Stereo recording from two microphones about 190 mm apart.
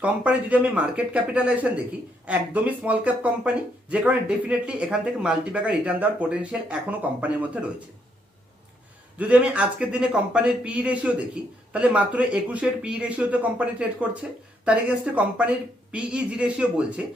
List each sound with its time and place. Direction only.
0.0 s speech: 10° right (ahead or behind)
9.1 s a man's voice: 5° right (ahead or behind)